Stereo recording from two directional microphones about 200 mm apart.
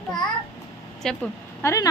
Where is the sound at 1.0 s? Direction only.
10° left (ahead or behind).